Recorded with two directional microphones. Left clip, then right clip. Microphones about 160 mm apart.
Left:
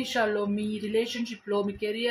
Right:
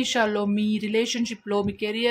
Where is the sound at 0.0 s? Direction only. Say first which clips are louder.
Right 3 dB; 40° right (ahead or behind).